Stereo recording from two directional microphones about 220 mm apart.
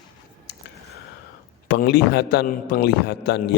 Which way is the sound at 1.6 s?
45° left (ahead or behind).